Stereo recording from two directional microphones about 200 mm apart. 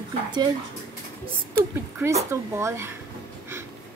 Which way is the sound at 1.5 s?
10° right (ahead or behind).